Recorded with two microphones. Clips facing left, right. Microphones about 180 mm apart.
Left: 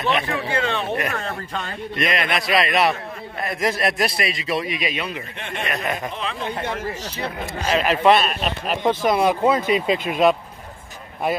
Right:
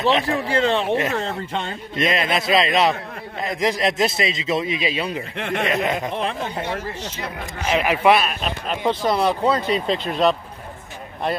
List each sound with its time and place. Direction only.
0.5 s speech: 35° right (ahead or behind)
5.4 s speech: 80° right
5.7 s speech: 20° right (ahead or behind)
7.6 s speech: 15° right (ahead or behind)
8.6 s speech: 10° left (ahead or behind)